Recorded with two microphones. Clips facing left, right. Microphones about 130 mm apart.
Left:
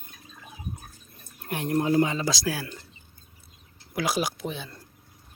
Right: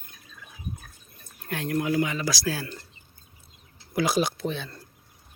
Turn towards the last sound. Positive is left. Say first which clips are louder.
# right 3 dB
turn(degrees=10)  # may be behind; listen again after turning